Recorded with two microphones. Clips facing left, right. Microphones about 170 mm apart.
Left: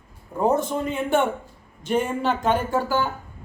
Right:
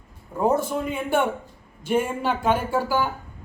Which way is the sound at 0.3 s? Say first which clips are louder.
Even; 10° right (ahead or behind).